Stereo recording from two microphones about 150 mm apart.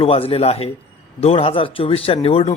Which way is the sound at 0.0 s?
40° left (ahead or behind).